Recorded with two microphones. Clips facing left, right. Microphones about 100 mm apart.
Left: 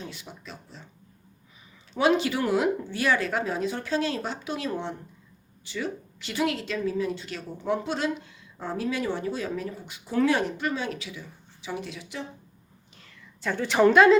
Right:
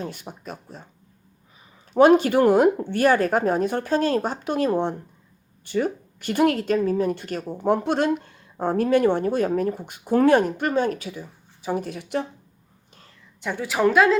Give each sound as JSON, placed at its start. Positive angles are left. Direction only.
{"t": 0.0, "sound": "speech", "side_deg": -50}
{"t": 1.9, "sound": "speech", "side_deg": -50}
{"t": 13.4, "sound": "a woman's voice", "side_deg": -10}